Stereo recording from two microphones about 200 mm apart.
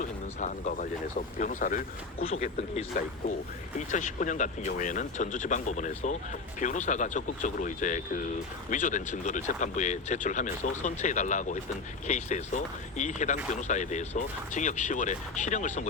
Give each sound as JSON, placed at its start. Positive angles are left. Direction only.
{"t": 0.0, "sound": "speech", "side_deg": 35}